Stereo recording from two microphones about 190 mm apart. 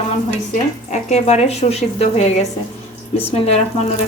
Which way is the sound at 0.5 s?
40° left (ahead or behind).